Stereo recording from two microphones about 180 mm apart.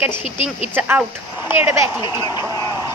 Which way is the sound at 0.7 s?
10° right (ahead or behind).